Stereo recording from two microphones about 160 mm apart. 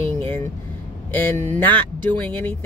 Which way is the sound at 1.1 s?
10° left (ahead or behind).